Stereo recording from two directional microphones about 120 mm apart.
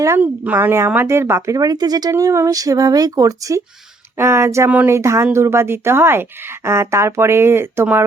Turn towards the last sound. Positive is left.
turn(degrees=-20)  # may be behind; listen again after turning